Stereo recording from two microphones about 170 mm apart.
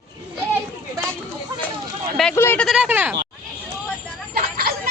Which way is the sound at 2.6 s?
5° right (ahead or behind).